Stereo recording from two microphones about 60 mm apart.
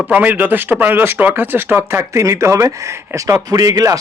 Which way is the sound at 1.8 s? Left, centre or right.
Right.